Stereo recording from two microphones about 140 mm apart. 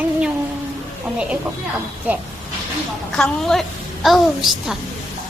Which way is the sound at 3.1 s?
5° left (ahead or behind).